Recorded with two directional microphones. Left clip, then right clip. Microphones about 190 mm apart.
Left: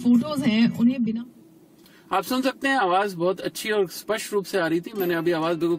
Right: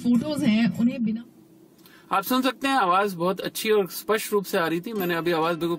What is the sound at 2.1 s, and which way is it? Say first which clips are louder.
Speech: even; 35° right (ahead or behind).